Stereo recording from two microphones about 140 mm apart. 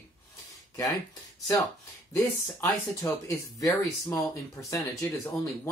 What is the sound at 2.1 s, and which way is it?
Speech, 20° left (ahead or behind).